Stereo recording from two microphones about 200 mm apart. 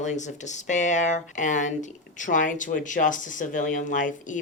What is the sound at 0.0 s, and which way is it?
Speech, 35° left (ahead or behind).